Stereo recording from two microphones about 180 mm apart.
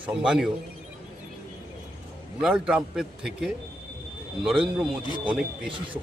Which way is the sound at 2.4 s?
5° right (ahead or behind).